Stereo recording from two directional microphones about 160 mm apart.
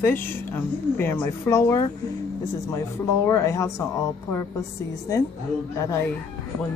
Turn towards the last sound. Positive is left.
turn(degrees=20)  # may be behind; listen again after turning